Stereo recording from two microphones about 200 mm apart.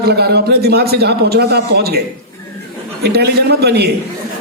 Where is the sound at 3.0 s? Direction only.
55° right (ahead or behind).